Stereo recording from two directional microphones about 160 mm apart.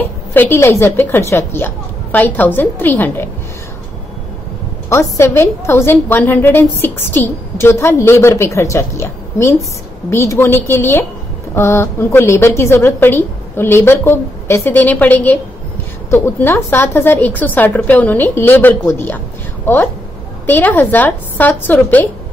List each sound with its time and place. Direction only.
0.3 s a woman's voice: 15° left (ahead or behind)
4.8 s a woman's voice: 20° left (ahead or behind)